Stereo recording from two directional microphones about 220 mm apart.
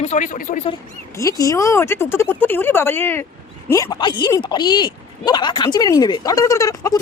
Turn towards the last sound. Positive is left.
turn(degrees=15)  # may be behind; listen again after turning